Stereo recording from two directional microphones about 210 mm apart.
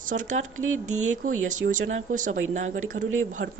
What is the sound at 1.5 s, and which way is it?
Speech, 40° right (ahead or behind).